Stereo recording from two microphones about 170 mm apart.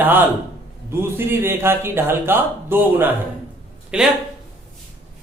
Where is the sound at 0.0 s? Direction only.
10° right (ahead or behind).